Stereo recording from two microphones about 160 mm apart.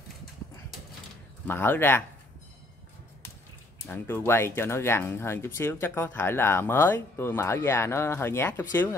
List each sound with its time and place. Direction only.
1.5 s speech: 15° left (ahead or behind)
3.8 s speech: 15° left (ahead or behind)